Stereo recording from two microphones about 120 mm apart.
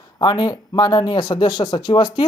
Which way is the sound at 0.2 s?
35° left (ahead or behind).